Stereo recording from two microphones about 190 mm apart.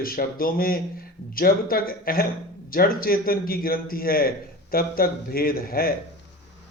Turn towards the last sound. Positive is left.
turn(degrees=50)  # may be behind; listen again after turning